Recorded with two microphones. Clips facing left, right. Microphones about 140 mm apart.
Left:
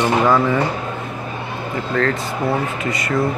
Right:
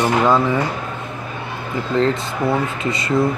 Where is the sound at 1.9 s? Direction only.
25° right (ahead or behind).